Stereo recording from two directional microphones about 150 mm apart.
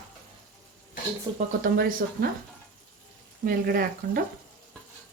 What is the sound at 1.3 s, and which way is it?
Speech, 70° right (ahead or behind).